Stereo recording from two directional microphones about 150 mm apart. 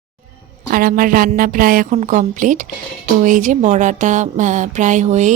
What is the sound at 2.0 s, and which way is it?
A woman's voice, 55° right (ahead or behind).